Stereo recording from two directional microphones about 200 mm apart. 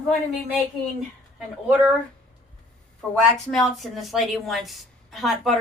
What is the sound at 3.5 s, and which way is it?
A woman's voice, centre (ahead or behind).